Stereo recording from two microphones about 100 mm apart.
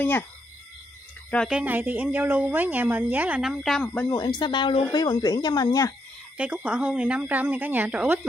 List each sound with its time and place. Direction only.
1.5 s speech: 15° right (ahead or behind)
3.4 s a woman's voice: centre (ahead or behind)
3.8 s speech: 15° left (ahead or behind)
4.1 s speech: 45° left (ahead or behind)
6.3 s speech: 10° right (ahead or behind)